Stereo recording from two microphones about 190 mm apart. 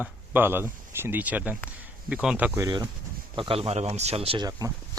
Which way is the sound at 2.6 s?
20° right (ahead or behind).